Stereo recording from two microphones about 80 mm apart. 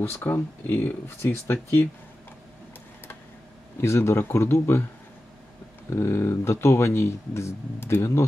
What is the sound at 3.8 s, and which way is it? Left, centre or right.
Speech, left.